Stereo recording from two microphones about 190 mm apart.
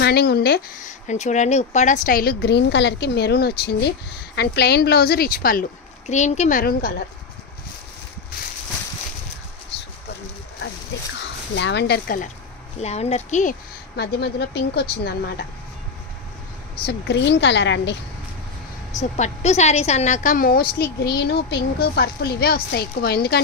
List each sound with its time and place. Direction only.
0.0 s speech: 55° left (ahead or behind)
0.8 s a woman's voice: 40° left (ahead or behind)
6.6 s a woman's voice: 50° left (ahead or behind)
11.5 s a woman's voice: 65° left (ahead or behind)
12.8 s speech: 35° left (ahead or behind)
13.9 s speech: 60° left (ahead or behind)
16.8 s a woman's voice: 65° left (ahead or behind)
18.9 s a woman's voice: 40° left (ahead or behind); by 23.4 s 55° left (ahead or behind)